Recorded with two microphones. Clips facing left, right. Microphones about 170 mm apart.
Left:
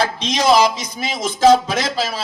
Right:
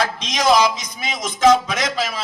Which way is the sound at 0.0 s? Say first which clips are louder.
Left 2 dB; 30° left (ahead or behind).